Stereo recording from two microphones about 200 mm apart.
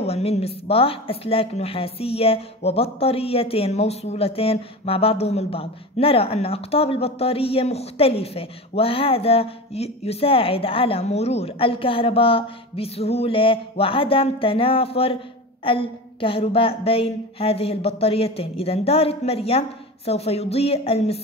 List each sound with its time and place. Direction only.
0.0 s a woman's voice: 30° left (ahead or behind)